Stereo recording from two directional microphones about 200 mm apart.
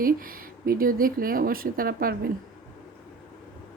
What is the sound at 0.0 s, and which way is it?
A woman's voice, 45° right (ahead or behind).